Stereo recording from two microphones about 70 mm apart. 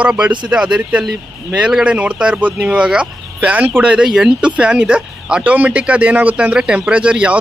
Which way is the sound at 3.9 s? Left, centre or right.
Centre.